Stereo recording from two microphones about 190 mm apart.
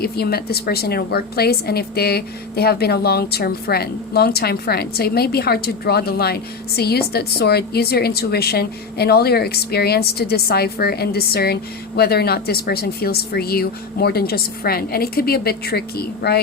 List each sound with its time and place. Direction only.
0.0 s a woman's voice: 55° left (ahead or behind)